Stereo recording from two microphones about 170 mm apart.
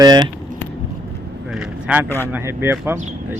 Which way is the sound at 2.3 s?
15° right (ahead or behind).